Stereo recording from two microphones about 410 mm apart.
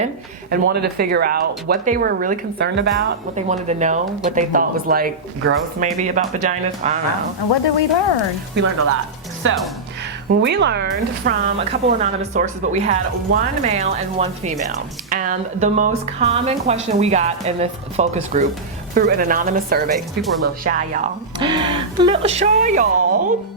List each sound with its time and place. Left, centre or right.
0.5 s speech: right
7.5 s speech: left
8.6 s speech: right